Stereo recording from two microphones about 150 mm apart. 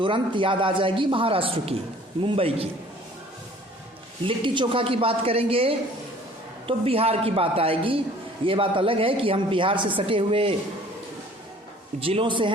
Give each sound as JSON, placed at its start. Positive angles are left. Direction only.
{"t": 0.0, "sound": "a man's voice", "side_deg": -35}
{"t": 4.3, "sound": "a man's voice", "side_deg": -35}
{"t": 11.9, "sound": "a man's voice", "side_deg": -40}